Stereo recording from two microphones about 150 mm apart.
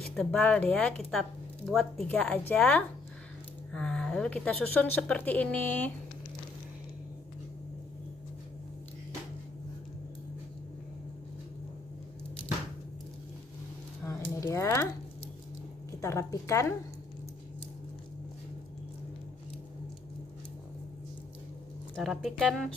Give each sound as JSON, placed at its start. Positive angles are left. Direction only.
{"t": 0.0, "sound": "speech", "side_deg": 5}
{"t": 14.0, "sound": "a sound", "side_deg": 15}
{"t": 14.4, "sound": "speech", "side_deg": 20}
{"t": 16.0, "sound": "a woman's voice", "side_deg": 20}
{"t": 21.9, "sound": "speech", "side_deg": 0}